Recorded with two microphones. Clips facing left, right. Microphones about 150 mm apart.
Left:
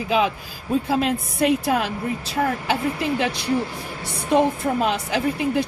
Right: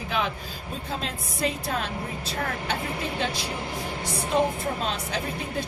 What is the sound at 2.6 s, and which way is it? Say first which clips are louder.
Speech: left 7 dB; 90° left.